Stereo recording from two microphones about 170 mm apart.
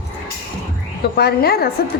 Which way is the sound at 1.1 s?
70° left (ahead or behind).